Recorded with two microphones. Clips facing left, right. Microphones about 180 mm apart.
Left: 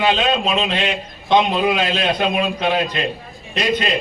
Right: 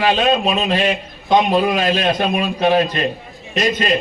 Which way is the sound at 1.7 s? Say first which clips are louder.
Right 2 dB; 40° right (ahead or behind).